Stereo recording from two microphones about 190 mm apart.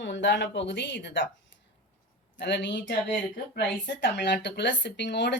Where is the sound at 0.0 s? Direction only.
70° left (ahead or behind).